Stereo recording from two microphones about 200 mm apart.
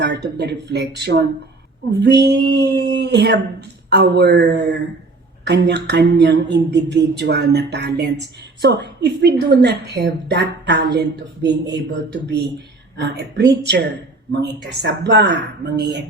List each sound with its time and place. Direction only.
0.0 s speech: 60° right (ahead or behind)